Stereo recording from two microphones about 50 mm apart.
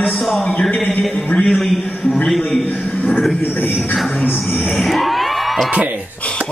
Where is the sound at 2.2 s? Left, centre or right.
Centre.